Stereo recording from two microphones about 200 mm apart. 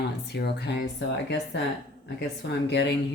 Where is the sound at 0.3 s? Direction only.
55° left (ahead or behind).